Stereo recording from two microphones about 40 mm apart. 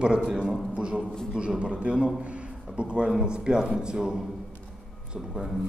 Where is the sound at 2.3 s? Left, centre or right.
Right.